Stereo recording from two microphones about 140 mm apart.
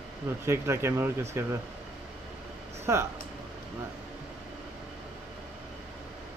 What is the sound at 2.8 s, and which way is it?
Speech, 20° right (ahead or behind).